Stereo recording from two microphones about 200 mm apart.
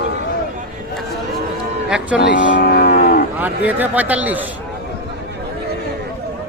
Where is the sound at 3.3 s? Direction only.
10° right (ahead or behind).